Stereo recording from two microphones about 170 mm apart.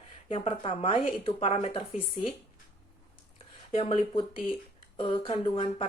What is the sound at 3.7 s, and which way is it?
Speech, 35° left (ahead or behind).